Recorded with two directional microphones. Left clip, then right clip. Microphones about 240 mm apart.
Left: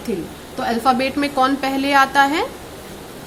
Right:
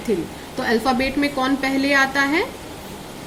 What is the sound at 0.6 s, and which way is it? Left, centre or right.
A woman's voice, centre.